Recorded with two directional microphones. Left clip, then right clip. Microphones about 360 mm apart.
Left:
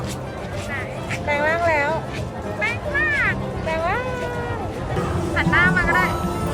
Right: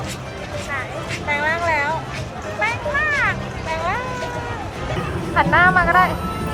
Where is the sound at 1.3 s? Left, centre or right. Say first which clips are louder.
Even; centre.